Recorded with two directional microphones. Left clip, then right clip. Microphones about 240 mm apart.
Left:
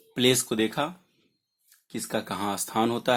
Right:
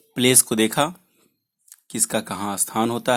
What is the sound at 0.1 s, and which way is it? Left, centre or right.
Speech, centre.